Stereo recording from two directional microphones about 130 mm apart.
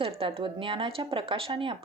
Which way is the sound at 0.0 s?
45° right (ahead or behind).